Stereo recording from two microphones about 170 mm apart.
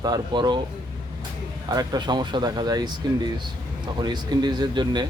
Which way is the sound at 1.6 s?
20° right (ahead or behind).